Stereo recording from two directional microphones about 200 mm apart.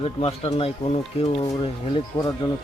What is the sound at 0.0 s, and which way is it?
A man's voice, 30° left (ahead or behind).